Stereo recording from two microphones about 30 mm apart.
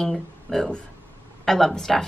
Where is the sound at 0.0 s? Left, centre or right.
Centre.